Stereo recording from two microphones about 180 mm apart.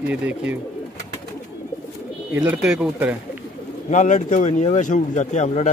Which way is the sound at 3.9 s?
45° left (ahead or behind).